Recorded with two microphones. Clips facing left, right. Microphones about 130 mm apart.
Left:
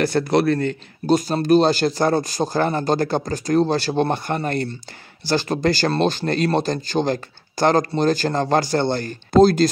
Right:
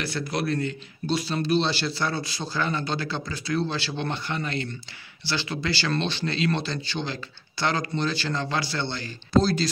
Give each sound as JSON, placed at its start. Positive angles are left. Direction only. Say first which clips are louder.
{"t": 0.0, "sound": "speech", "louder": "left 11 dB", "side_deg": 45}